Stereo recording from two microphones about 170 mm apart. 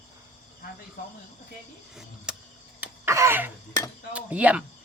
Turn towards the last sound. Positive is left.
turn(degrees=-10)  # may be behind; listen again after turning